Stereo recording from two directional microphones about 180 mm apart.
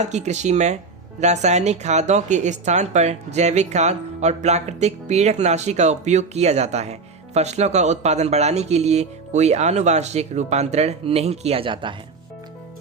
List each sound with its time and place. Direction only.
0.0 s speech: 40° right (ahead or behind)